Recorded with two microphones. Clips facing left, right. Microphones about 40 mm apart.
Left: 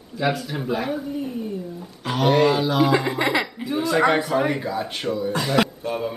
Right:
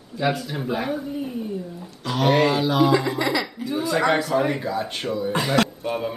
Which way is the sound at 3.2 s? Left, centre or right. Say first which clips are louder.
Left 2 dB; left.